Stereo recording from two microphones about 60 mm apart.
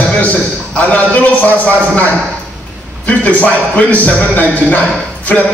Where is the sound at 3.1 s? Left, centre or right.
Left.